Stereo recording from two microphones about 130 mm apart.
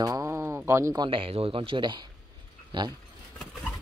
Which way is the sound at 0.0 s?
25° right (ahead or behind).